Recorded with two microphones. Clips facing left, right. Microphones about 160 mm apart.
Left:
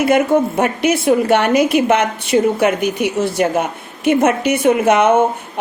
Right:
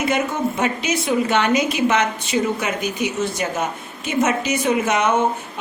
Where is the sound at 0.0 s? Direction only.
55° left (ahead or behind).